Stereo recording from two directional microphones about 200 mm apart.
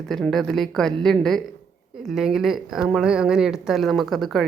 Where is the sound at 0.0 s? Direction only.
5° left (ahead or behind).